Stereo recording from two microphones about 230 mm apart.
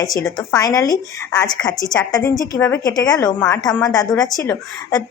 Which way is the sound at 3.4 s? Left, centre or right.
Centre.